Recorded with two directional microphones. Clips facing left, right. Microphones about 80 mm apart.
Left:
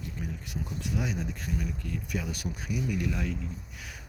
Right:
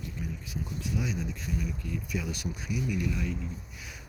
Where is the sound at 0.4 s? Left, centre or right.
Left.